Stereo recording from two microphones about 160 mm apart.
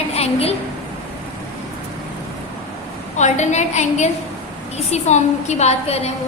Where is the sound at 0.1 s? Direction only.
40° left (ahead or behind).